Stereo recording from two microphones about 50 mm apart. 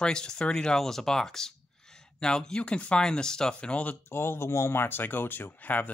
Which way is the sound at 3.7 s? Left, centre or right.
Left.